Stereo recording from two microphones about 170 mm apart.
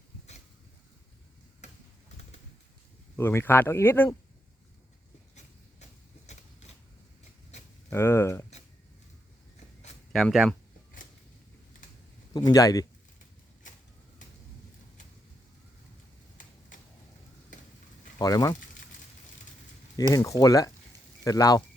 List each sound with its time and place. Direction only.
3.2 s speech: 15° left (ahead or behind)
5.8 s a sound: 40° left (ahead or behind)
7.9 s speech: 15° left (ahead or behind)
10.1 s speech: 5° left (ahead or behind)
12.3 s speech: 25° left (ahead or behind)
18.2 s speech: 20° left (ahead or behind)
20.0 s speech: 20° left (ahead or behind)